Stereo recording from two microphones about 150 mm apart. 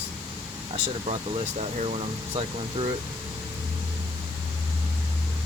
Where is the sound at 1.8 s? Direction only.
45° right (ahead or behind).